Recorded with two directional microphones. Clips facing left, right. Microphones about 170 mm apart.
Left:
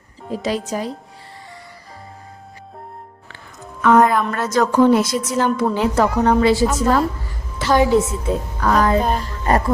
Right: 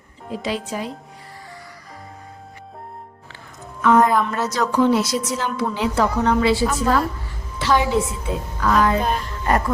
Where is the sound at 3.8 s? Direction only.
70° left (ahead or behind).